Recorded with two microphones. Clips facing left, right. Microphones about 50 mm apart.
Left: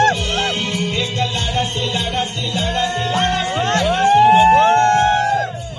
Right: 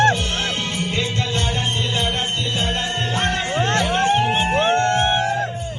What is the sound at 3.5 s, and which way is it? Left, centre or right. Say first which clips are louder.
Music: left 2 dB; left.